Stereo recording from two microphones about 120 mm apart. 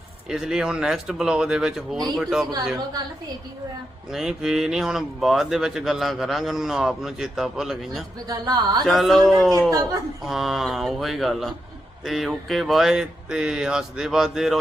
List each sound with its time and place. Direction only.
0.3 s speech: 5° right (ahead or behind)
4.1 s speech: 5° right (ahead or behind)
8.3 s speech: 35° right (ahead or behind)
8.9 s speech: centre (ahead or behind)
9.6 s a woman's voice: 30° right (ahead or behind)
10.2 s speech: centre (ahead or behind)